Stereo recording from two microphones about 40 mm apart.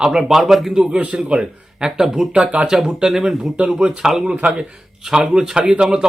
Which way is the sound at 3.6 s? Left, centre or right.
Right.